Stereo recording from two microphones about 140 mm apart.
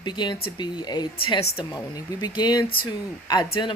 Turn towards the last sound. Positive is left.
turn(degrees=35)  # may be behind; listen again after turning